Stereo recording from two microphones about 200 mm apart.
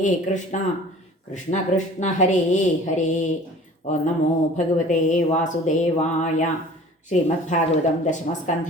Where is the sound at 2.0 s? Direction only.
35° left (ahead or behind).